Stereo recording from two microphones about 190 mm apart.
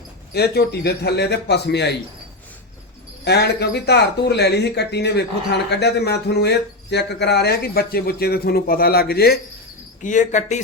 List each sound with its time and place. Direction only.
0.3 s speech: 60° left (ahead or behind)
3.2 s speech: 60° left (ahead or behind)
10.0 s speech: 40° left (ahead or behind)